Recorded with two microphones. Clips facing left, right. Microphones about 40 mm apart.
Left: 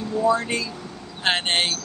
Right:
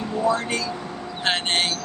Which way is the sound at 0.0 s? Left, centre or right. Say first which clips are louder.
Left 1 dB; right.